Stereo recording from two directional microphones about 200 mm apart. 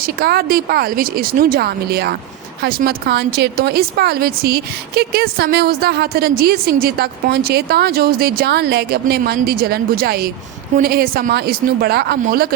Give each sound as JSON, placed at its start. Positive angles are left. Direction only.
{"t": 0.0, "sound": "speech", "side_deg": -50}